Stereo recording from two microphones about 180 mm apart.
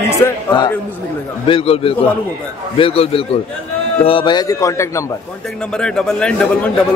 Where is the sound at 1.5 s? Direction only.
30° left (ahead or behind).